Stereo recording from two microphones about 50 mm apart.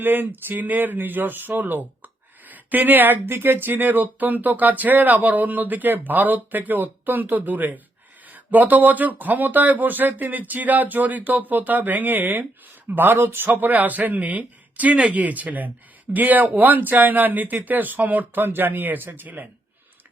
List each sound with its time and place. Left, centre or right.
0.0 s speech: right
13.1 s speech: right
13.5 s speech: right